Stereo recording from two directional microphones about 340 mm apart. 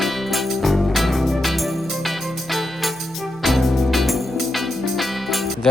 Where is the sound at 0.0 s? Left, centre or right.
Centre.